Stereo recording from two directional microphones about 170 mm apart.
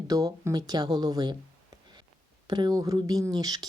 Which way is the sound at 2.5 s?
25° right (ahead or behind).